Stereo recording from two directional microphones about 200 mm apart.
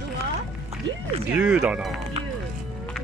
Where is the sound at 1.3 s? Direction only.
5° right (ahead or behind).